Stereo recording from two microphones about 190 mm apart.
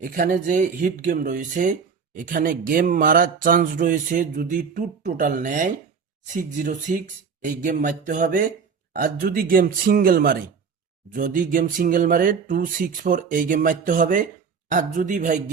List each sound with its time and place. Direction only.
0.0 s speech: 50° right (ahead or behind)